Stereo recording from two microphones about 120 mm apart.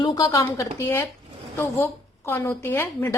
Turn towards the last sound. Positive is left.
turn(degrees=20)  # may be behind; listen again after turning